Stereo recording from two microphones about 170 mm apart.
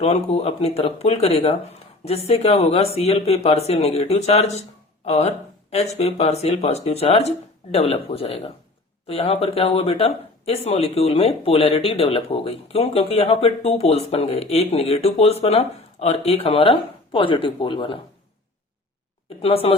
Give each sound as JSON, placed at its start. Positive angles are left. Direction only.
{"t": 0.0, "sound": "speech", "side_deg": 40}
{"t": 19.4, "sound": "speech", "side_deg": 35}